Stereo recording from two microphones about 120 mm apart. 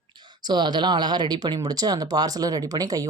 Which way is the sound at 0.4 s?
40° right (ahead or behind).